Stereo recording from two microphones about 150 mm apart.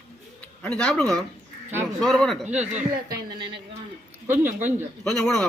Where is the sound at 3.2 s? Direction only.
30° right (ahead or behind).